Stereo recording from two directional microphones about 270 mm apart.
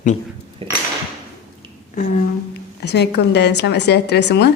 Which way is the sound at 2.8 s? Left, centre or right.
Left.